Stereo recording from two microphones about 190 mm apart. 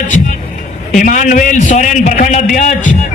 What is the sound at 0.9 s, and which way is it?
Speech, 45° left (ahead or behind).